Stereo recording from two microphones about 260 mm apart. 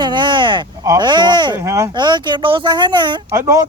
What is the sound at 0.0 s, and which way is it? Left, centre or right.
Speech, centre.